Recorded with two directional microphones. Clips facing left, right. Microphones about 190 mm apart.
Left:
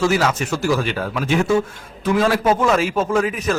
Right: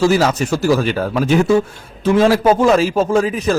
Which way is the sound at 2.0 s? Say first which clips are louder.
Right 5 dB; 25° right (ahead or behind).